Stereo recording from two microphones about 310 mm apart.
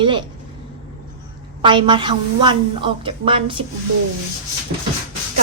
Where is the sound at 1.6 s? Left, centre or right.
Centre.